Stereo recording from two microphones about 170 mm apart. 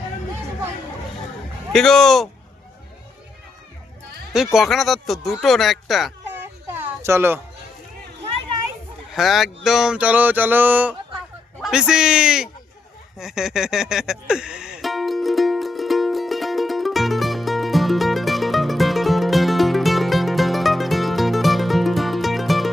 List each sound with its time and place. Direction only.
1.7 s speech: centre (ahead or behind)
4.5 s speech: centre (ahead or behind)
6.7 s a sound: 15° right (ahead or behind)
9.1 s speech: centre (ahead or behind)
9.6 s a sound: 5° right (ahead or behind)
11.6 s speech: 5° right (ahead or behind)
13.1 s music: 5° right (ahead or behind)